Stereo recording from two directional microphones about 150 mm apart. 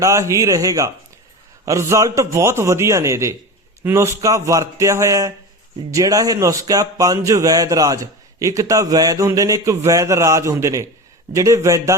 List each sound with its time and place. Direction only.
0.0 s speech: 20° right (ahead or behind)